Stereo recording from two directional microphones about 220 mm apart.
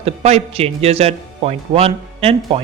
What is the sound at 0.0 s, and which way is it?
Speech, 30° right (ahead or behind).